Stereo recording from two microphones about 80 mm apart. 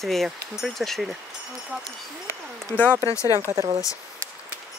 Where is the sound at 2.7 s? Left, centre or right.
Left.